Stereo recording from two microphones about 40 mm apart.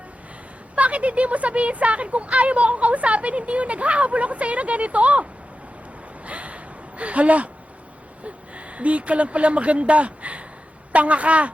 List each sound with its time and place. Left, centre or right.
0.8 s speech: right
6.2 s gasp: right
8.2 s speech: right